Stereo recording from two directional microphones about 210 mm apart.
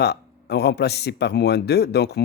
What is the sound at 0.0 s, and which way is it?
Speech, 50° left (ahead or behind).